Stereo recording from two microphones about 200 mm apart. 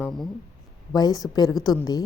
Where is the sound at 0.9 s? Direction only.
20° left (ahead or behind).